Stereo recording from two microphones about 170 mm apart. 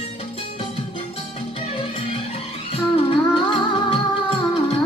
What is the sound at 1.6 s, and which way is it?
Music, 35° left (ahead or behind).